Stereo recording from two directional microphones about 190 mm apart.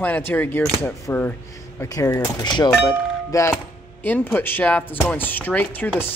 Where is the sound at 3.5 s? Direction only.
10° left (ahead or behind).